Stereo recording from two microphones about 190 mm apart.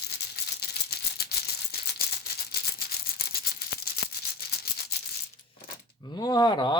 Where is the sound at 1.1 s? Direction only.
55° left (ahead or behind).